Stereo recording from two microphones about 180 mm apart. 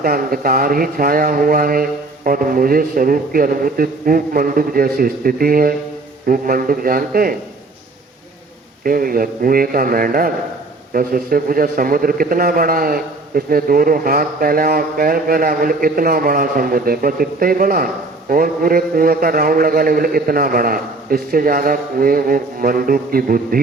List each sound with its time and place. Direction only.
0.0 s a man's voice: 55° right (ahead or behind)
8.8 s a man's voice: 55° right (ahead or behind)